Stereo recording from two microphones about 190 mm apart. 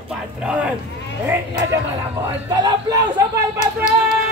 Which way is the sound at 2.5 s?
20° right (ahead or behind).